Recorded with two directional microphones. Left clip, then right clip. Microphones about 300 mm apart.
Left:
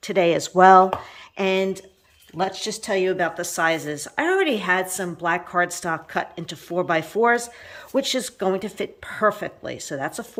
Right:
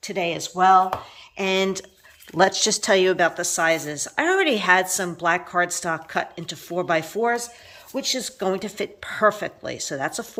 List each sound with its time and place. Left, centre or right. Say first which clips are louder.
0.0 s speech: left 6 dB; centre
1.4 s a woman's voice: even; centre
2.4 s a woman's voice: right 7 dB; centre